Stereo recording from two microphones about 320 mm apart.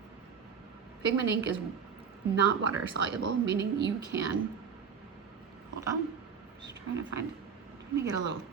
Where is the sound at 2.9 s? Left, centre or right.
Right.